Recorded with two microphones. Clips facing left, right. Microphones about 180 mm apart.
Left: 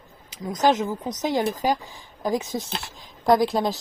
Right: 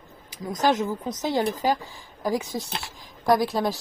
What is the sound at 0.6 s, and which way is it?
Speech, 20° left (ahead or behind).